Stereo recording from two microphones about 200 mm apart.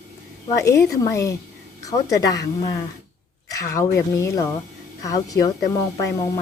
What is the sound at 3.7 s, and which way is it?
A woman's voice, 15° left (ahead or behind).